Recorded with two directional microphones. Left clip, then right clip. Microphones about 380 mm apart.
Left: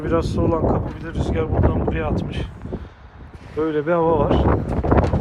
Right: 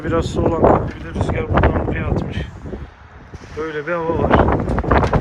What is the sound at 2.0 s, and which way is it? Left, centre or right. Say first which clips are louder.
Speech: right 1 dB; centre.